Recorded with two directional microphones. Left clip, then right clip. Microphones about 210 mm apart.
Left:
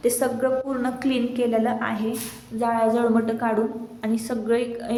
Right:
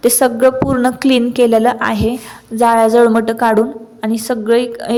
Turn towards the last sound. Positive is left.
turn(degrees=-45)  # may be behind; listen again after turning